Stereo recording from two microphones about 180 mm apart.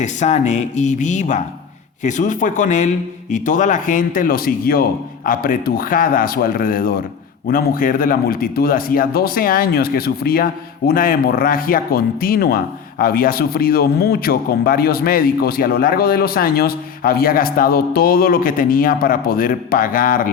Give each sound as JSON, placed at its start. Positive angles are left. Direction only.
{"t": 0.0, "sound": "a man's voice", "side_deg": 40}